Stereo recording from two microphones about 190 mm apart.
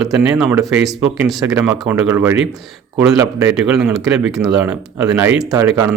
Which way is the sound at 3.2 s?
15° right (ahead or behind).